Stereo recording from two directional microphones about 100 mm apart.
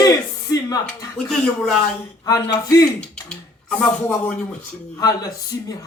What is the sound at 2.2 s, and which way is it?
Speech, 35° left (ahead or behind).